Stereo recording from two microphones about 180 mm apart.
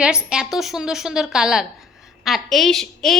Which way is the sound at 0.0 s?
5° right (ahead or behind).